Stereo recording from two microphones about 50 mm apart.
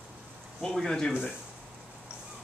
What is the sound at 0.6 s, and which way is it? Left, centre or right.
Speech, centre.